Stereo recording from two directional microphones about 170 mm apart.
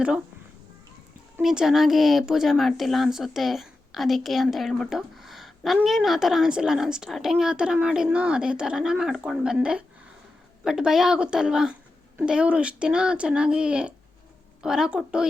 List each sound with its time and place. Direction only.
1.4 s speech: centre (ahead or behind)